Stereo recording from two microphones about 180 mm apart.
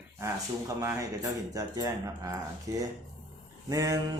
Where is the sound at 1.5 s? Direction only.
20° right (ahead or behind).